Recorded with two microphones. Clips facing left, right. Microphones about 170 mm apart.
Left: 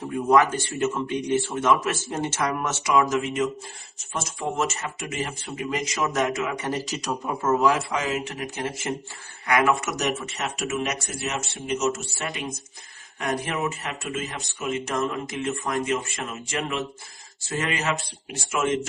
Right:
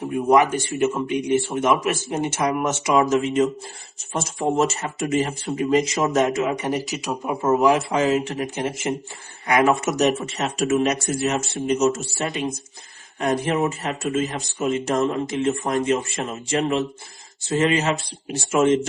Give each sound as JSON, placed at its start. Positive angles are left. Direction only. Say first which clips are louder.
{"t": 0.0, "sound": "speech", "louder": "right 2 dB", "side_deg": -20}